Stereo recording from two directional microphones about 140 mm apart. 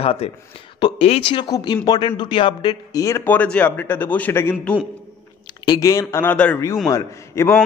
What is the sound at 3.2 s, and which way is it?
Speech, 10° left (ahead or behind).